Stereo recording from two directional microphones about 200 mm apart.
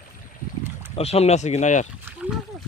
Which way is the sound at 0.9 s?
30° left (ahead or behind).